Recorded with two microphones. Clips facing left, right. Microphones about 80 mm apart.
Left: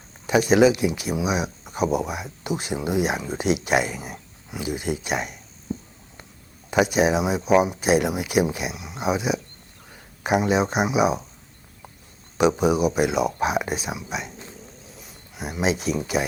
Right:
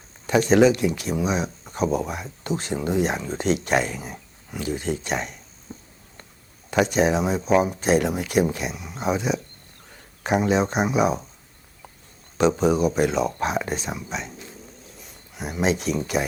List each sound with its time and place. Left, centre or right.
0.3 s speech: centre
6.7 s speech: centre
12.4 s speech: centre
14.8 s a sound: centre